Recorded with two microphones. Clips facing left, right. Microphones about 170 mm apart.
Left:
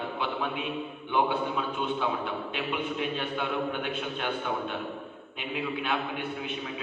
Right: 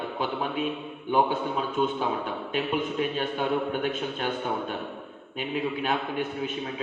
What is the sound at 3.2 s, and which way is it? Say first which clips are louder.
A man's voice: right 4 dB; 40° right (ahead or behind).